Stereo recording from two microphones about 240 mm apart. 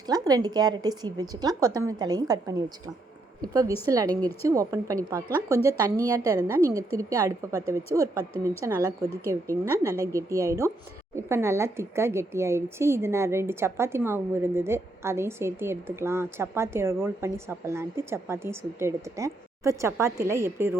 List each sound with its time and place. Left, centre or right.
0.1 s speech: centre
4.1 s speech: centre
4.4 s speech: centre